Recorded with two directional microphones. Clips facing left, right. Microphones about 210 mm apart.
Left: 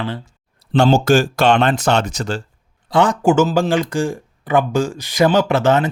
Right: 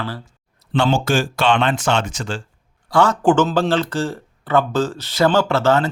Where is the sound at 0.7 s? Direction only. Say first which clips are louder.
Left 5 dB; 40° left (ahead or behind).